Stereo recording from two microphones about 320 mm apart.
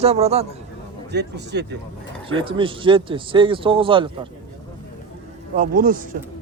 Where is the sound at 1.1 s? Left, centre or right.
Right.